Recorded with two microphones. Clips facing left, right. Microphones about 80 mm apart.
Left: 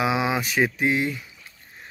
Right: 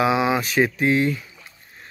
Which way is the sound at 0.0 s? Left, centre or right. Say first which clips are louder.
Right 4 dB; centre.